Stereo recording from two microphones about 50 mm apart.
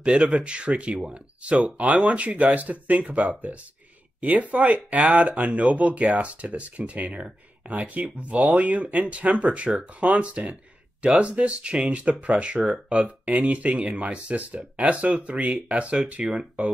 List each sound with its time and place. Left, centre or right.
0.0 s speech: right
12.5 s speech: centre
13.2 s speech: right